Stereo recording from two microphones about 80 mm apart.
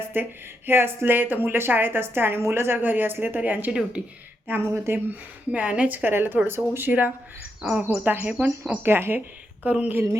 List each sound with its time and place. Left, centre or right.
0.1 s speech: right
4.4 s speech: right
5.5 s speech: centre
8.9 s speech: right
9.6 s speech: centre